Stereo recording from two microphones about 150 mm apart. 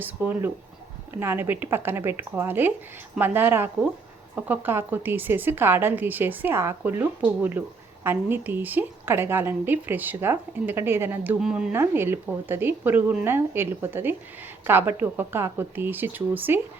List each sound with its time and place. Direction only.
0.0 s a woman's voice: 15° right (ahead or behind)
11.7 s a woman's voice: 15° right (ahead or behind)